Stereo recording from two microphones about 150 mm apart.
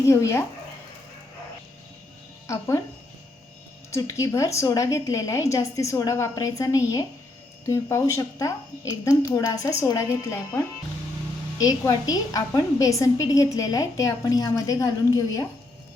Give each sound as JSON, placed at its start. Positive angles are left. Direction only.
{"t": 0.1, "sound": "a woman's voice", "side_deg": 20}
{"t": 2.5, "sound": "a woman's voice", "side_deg": 20}
{"t": 3.9, "sound": "a woman's voice", "side_deg": 20}